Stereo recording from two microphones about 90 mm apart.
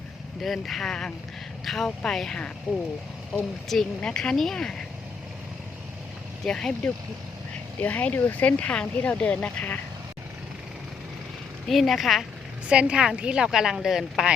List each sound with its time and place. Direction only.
0.4 s speech: centre (ahead or behind)
3.7 s speech: 5° left (ahead or behind)
6.4 s speech: 5° left (ahead or behind)
7.8 s speech: 15° left (ahead or behind)
11.7 s a woman's voice: centre (ahead or behind)